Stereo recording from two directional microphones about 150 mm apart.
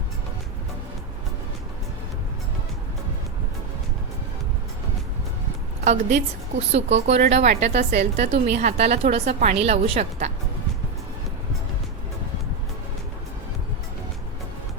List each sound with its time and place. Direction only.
5.8 s a woman's voice: 50° right (ahead or behind)